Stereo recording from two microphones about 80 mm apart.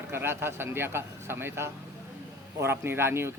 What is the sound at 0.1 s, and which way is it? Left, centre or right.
Speech, right.